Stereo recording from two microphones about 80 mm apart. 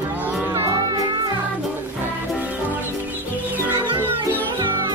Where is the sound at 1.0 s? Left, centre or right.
Right.